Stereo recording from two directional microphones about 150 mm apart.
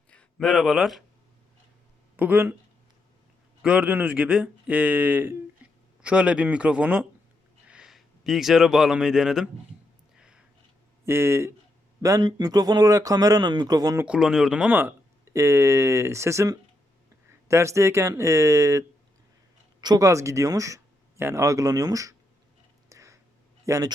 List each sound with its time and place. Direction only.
0.1 s speech: 5° left (ahead or behind)
2.1 s speech: 10° right (ahead or behind)
3.6 s speech: 10° right (ahead or behind)
10.2 s a sound: 5° right (ahead or behind)
11.0 s speech: 15° right (ahead or behind)
14.0 s speech: 5° right (ahead or behind); by 22.1 s 25° right (ahead or behind)
22.9 s a sound: 20° right (ahead or behind)
23.6 s a man's voice: 20° right (ahead or behind)